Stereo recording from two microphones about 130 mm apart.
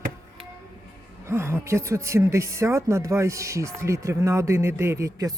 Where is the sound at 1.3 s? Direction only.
20° right (ahead or behind).